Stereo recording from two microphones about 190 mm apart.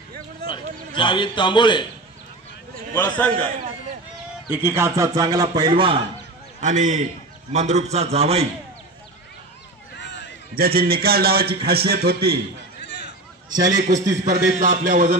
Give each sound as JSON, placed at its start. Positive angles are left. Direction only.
{"t": 0.9, "sound": "a man's voice", "side_deg": 25}
{"t": 2.9, "sound": "a man's voice", "side_deg": 10}
{"t": 4.5, "sound": "a man's voice", "side_deg": -10}
{"t": 6.6, "sound": "a man's voice", "side_deg": -40}
{"t": 9.9, "sound": "a sound", "side_deg": 65}
{"t": 10.5, "sound": "a man's voice", "side_deg": -50}
{"t": 12.8, "sound": "a sound", "side_deg": 65}
{"t": 13.6, "sound": "a man's voice", "side_deg": -40}